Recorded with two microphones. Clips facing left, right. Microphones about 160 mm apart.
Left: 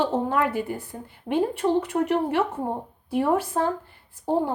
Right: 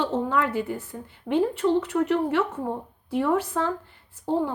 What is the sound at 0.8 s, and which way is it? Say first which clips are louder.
Speech: even; 10° left (ahead or behind).